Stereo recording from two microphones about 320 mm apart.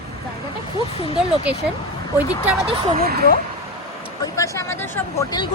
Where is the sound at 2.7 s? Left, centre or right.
Right.